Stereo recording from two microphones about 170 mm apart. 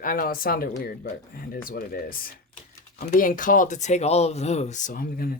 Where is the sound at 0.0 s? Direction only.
55° left (ahead or behind).